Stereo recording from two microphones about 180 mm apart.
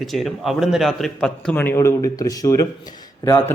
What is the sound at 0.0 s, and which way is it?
A man's voice, centre (ahead or behind).